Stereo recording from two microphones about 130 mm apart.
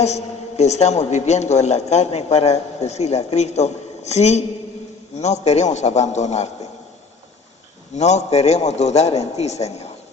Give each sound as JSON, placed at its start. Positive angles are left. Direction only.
{"t": 0.0, "sound": "a man's voice", "side_deg": 60}
{"t": 7.9, "sound": "a man's voice", "side_deg": 60}